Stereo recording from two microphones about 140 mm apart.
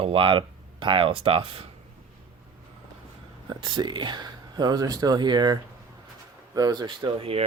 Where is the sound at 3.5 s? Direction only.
35° right (ahead or behind).